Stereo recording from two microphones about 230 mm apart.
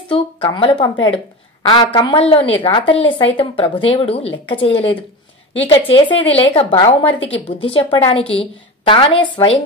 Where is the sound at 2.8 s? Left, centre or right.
Left.